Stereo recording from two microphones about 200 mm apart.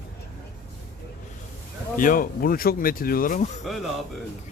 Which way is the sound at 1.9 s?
45° left (ahead or behind).